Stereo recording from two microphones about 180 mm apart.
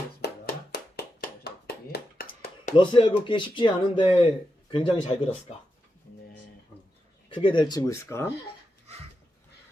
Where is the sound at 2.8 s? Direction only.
30° left (ahead or behind).